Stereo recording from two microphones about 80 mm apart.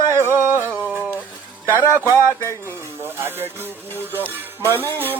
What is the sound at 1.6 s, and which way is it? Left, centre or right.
Speech, right.